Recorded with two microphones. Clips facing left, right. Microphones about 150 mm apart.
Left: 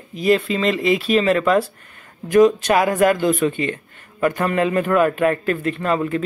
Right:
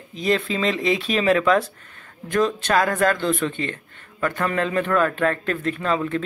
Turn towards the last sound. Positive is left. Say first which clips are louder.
# left 3 dB
turn(degrees=5)  # may be behind; listen again after turning